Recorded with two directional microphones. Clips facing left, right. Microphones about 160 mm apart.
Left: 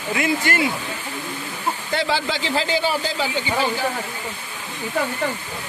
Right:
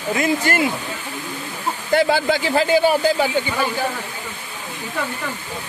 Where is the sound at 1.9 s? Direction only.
50° right (ahead or behind).